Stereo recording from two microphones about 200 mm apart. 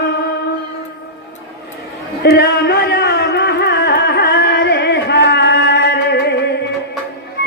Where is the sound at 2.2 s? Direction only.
55° left (ahead or behind).